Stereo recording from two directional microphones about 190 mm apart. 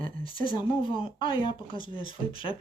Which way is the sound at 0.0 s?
25° left (ahead or behind).